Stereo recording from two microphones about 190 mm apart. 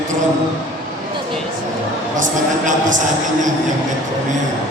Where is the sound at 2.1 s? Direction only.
40° right (ahead or behind).